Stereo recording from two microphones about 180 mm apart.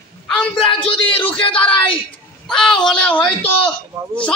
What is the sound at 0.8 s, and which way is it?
Speech, 30° left (ahead or behind).